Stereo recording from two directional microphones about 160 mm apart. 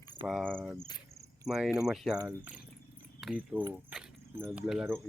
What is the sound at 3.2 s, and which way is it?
Keys jangling, 5° right (ahead or behind).